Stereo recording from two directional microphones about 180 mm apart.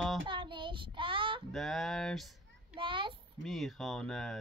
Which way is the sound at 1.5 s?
Centre (ahead or behind).